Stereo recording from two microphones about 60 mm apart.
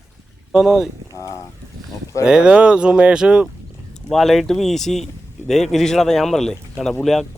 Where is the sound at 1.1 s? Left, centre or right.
Left.